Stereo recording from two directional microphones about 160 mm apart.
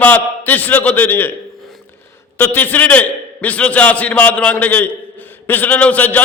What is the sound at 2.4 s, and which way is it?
A man's voice, 10° left (ahead or behind).